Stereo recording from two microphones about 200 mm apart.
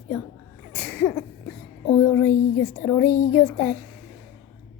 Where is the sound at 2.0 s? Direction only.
10° left (ahead or behind).